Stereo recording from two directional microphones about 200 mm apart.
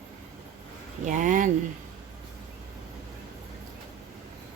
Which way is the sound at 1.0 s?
40° right (ahead or behind).